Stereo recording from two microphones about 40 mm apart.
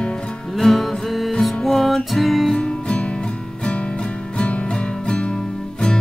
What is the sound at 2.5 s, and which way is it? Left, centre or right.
Music, left.